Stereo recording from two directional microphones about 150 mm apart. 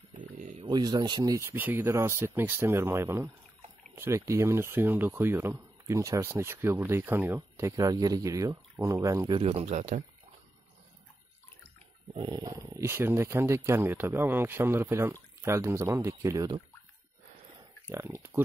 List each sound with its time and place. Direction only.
0.1 s a sound: 60° right (ahead or behind)
0.7 s speech: 30° right (ahead or behind)
9.3 s speech: 40° right (ahead or behind)
9.8 s speech: 55° right (ahead or behind)
12.1 s speech: 30° right (ahead or behind)
17.8 s speech: 15° right (ahead or behind)